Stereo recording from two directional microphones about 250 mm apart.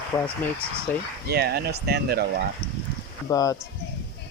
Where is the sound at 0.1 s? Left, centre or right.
Centre.